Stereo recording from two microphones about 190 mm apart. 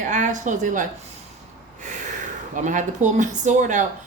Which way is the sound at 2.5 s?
40° right (ahead or behind).